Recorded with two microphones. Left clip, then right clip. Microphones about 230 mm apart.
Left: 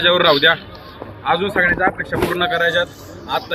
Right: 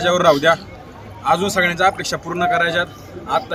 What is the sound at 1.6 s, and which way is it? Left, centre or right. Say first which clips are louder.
Speech: even; right.